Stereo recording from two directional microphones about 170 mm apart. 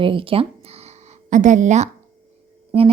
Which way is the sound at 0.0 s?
30° right (ahead or behind).